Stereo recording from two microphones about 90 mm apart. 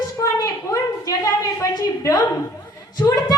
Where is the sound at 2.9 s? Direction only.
50° left (ahead or behind).